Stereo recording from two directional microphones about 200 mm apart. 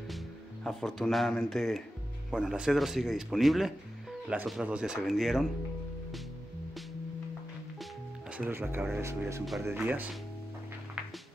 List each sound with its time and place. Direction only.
0.7 s speech: centre (ahead or behind)
7.8 s speech: 5° right (ahead or behind)